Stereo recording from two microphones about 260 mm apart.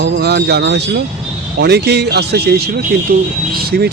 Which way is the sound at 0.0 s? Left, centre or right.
Right.